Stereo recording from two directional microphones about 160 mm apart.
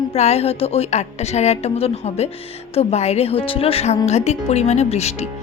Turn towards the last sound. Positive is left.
turn(degrees=40)  # may be behind; listen again after turning